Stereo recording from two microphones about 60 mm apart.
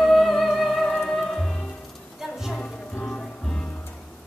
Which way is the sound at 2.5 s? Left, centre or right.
Left.